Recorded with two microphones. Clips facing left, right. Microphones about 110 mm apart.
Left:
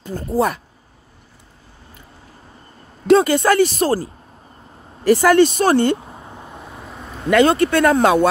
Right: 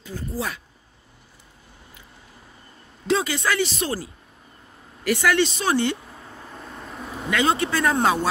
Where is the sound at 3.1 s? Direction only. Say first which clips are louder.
Left 10 dB; 50° left (ahead or behind).